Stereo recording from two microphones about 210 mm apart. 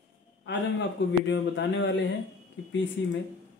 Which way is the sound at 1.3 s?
60° left (ahead or behind).